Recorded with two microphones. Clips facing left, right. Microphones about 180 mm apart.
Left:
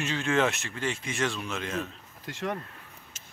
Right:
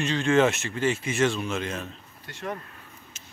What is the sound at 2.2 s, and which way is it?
Speech, 90° left.